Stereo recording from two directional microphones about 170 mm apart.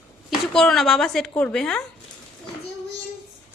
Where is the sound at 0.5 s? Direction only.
Centre (ahead or behind).